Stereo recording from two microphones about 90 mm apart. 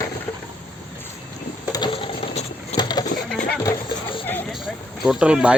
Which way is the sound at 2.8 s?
50° left (ahead or behind).